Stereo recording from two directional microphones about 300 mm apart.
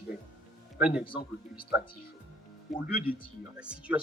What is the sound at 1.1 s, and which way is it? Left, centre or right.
Speech, centre.